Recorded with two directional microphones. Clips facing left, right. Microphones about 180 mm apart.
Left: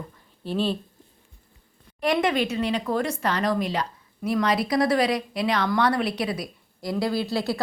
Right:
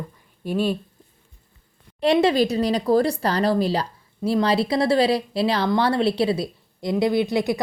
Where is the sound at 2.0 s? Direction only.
30° right (ahead or behind).